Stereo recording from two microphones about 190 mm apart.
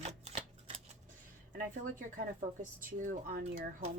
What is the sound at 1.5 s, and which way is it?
Speech, 45° right (ahead or behind).